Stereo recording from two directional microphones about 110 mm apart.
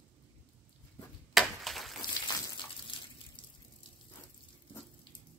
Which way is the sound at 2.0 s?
40° left (ahead or behind).